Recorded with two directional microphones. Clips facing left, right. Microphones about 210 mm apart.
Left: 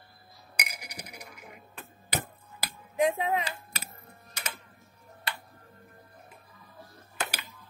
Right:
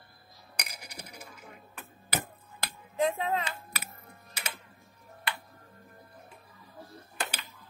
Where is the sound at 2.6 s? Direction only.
15° left (ahead or behind).